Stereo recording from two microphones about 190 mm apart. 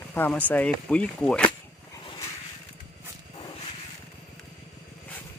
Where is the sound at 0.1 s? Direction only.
10° left (ahead or behind).